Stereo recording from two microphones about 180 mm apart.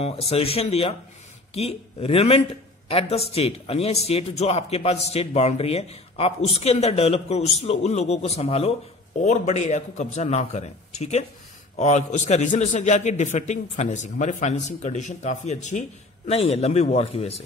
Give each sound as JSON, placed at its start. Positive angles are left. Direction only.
{"t": 0.0, "sound": "a man's voice", "side_deg": 35}